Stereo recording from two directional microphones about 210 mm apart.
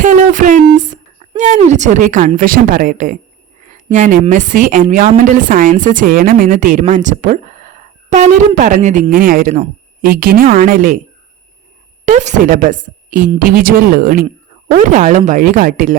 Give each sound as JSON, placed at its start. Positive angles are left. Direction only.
{"t": 0.0, "sound": "a sound", "side_deg": -35}
{"t": 1.2, "sound": "a woman's voice", "side_deg": -35}
{"t": 12.0, "sound": "a woman's voice", "side_deg": -35}